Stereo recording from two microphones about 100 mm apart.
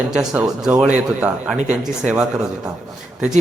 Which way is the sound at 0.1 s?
5° right (ahead or behind).